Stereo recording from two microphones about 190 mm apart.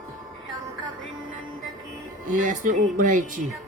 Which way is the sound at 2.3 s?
45° right (ahead or behind).